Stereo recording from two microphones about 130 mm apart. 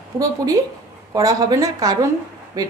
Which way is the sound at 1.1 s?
25° right (ahead or behind).